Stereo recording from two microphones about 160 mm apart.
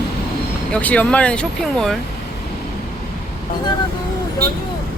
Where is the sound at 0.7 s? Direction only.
10° left (ahead or behind).